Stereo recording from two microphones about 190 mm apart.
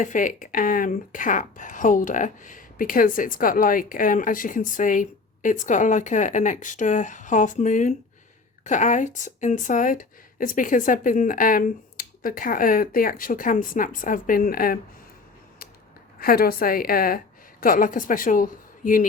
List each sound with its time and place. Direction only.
0.0 s speech: 45° left (ahead or behind)
16.2 s a woman's voice: 50° left (ahead or behind)